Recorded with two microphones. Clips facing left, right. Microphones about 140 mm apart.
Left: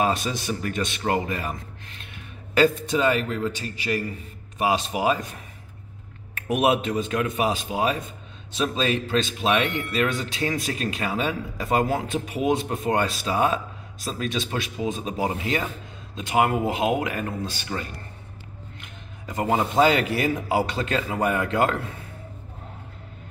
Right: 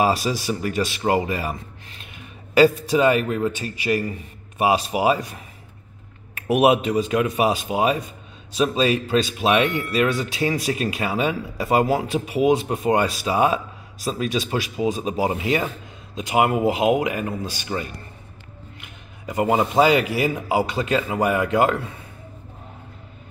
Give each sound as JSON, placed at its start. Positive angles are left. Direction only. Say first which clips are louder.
{"t": 0.0, "sound": "a man's voice", "louder": "right 4 dB", "side_deg": -10}
{"t": 6.3, "sound": "speech", "louder": "right 4 dB", "side_deg": -10}
{"t": 8.5, "sound": "speech", "louder": "right 4 dB", "side_deg": -5}
{"t": 15.3, "sound": "speech", "louder": "right 4 dB", "side_deg": -20}
{"t": 19.4, "sound": "speech", "louder": "right 2 dB", "side_deg": -15}